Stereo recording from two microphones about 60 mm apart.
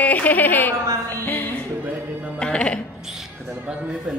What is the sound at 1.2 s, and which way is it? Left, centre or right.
Music, left.